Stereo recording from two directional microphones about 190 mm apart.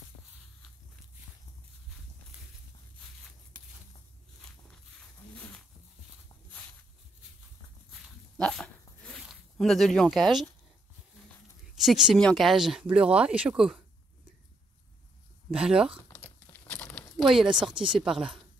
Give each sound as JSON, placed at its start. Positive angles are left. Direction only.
{"t": 5.3, "sound": "a sound", "side_deg": 5}
{"t": 8.4, "sound": "a sound", "side_deg": 5}
{"t": 11.7, "sound": "speech", "side_deg": 0}
{"t": 15.5, "sound": "speech", "side_deg": -5}
{"t": 16.5, "sound": "crumpling", "side_deg": 10}
{"t": 17.5, "sound": "speech", "side_deg": -25}
{"t": 18.0, "sound": "speech", "side_deg": -5}